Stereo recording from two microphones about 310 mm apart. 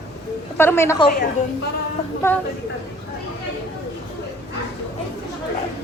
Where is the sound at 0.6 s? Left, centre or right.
Centre.